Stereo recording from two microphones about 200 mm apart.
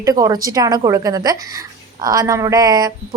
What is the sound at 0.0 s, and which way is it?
A woman's voice, 20° right (ahead or behind).